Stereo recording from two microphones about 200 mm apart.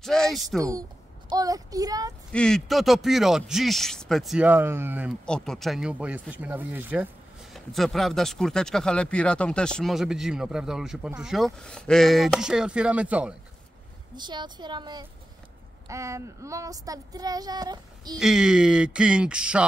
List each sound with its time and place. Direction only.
0.0 s speech: centre (ahead or behind)
0.6 s speech: 15° right (ahead or behind)
2.3 s speech: 5° left (ahead or behind)
5.2 s speech: 5° left (ahead or behind)
14.1 s a woman's voice: 20° right (ahead or behind)
18.2 s speech: centre (ahead or behind)